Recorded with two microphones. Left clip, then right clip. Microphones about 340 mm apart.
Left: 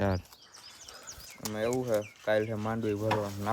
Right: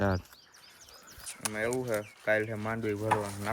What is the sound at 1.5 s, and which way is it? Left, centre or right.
Speech, centre.